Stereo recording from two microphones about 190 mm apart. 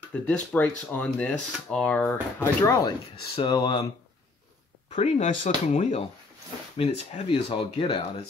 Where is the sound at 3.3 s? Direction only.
25° left (ahead or behind).